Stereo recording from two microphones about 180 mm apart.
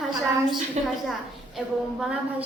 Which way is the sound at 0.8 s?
35° right (ahead or behind).